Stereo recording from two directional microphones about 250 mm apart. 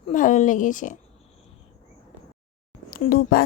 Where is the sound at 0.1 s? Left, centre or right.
Left.